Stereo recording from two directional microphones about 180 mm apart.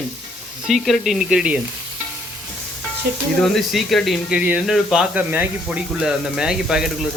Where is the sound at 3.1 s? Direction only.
60° right (ahead or behind).